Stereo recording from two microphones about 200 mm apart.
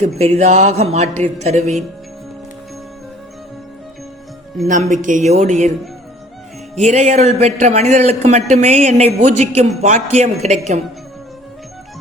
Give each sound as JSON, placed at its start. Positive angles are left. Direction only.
{"t": 0.2, "sound": "speech", "side_deg": -35}
{"t": 4.7, "sound": "speech", "side_deg": -40}
{"t": 6.7, "sound": "speech", "side_deg": -35}